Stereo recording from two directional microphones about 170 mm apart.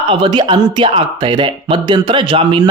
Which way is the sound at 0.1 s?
25° right (ahead or behind).